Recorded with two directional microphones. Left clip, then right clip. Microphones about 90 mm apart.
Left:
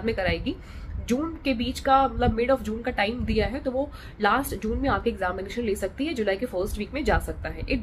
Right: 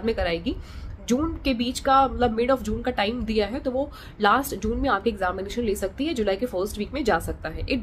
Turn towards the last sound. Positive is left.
turn(degrees=-35)  # may be behind; listen again after turning